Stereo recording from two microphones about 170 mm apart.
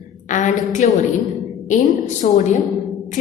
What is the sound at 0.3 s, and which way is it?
Speech, 45° left (ahead or behind).